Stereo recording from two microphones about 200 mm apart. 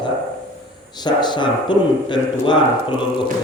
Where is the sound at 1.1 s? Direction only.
20° left (ahead or behind).